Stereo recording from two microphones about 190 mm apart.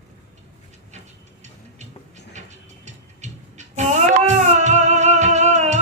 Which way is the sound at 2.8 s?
35° right (ahead or behind).